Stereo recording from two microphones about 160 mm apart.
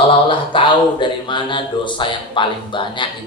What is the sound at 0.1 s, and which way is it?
Speech, 30° left (ahead or behind).